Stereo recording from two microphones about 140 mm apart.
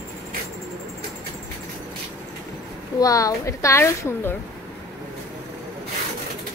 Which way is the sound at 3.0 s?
25° left (ahead or behind).